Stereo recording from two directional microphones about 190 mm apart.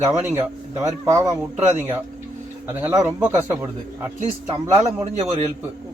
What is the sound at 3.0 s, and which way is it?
Speech, 10° right (ahead or behind).